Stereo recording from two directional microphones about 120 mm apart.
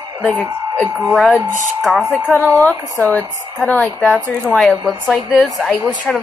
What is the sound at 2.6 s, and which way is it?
A woman's voice, 10° left (ahead or behind).